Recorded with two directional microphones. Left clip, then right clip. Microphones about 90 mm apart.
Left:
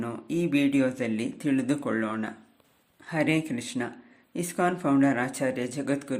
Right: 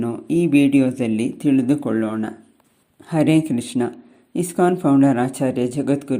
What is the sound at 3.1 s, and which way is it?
Speech, 40° right (ahead or behind).